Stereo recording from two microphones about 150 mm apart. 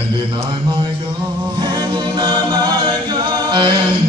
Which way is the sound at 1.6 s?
25° right (ahead or behind).